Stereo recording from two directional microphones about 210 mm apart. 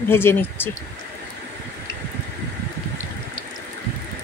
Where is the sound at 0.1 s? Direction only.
10° left (ahead or behind).